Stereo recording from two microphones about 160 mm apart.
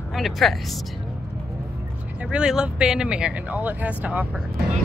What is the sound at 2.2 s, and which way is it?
Speech, 5° right (ahead or behind).